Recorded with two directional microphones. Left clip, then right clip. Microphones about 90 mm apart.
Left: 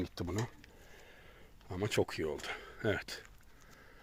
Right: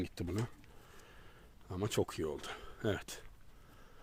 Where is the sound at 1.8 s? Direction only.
25° right (ahead or behind).